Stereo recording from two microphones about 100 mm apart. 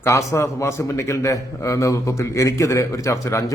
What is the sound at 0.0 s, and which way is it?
A man's voice, 35° left (ahead or behind).